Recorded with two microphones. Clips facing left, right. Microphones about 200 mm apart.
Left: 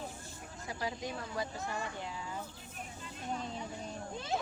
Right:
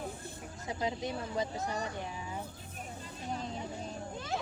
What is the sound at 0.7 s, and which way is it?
Speech, 20° right (ahead or behind).